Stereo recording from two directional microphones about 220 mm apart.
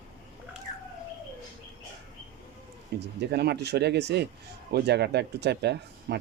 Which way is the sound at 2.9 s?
50° right (ahead or behind).